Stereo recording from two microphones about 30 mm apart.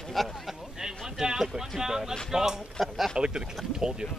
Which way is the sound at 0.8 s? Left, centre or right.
Centre.